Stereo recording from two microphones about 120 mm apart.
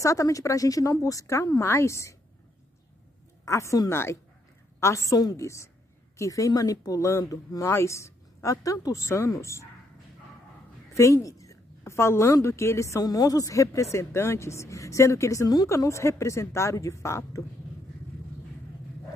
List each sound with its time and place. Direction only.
0.0 s a woman's voice: 25° left (ahead or behind)
3.4 s a woman's voice: 25° left (ahead or behind)
10.9 s a woman's voice: 25° left (ahead or behind)